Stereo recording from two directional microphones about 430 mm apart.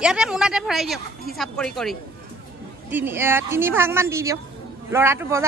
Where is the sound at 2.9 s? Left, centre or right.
Centre.